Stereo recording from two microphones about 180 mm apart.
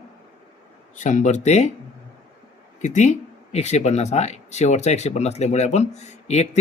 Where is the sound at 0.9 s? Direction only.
45° left (ahead or behind).